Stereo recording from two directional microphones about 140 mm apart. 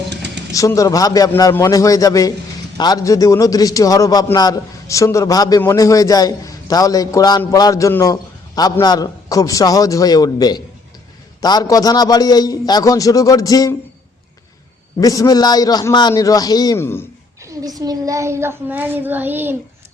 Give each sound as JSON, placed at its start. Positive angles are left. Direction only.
{"t": 0.5, "sound": "a man's voice", "side_deg": 25}
{"t": 15.0, "sound": "a man's voice", "side_deg": 25}
{"t": 16.7, "sound": "speech", "side_deg": 15}
{"t": 17.4, "sound": "a child's voice", "side_deg": -25}